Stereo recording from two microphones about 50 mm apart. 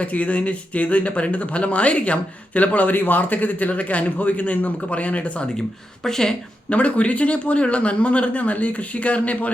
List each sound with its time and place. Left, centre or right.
0.0 s a man's voice: left
6.1 s a woman's voice: centre
6.7 s speech: left